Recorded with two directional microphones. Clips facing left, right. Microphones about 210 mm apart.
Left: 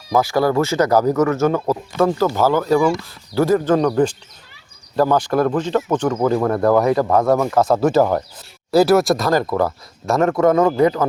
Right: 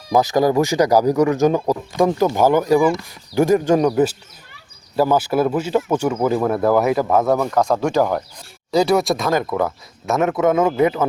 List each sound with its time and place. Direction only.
0.1 s speech: 20° right (ahead or behind)